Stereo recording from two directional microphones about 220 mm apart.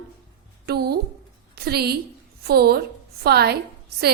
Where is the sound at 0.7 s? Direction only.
45° right (ahead or behind).